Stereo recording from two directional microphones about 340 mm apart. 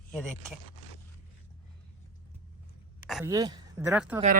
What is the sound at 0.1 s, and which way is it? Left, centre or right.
Speech, centre.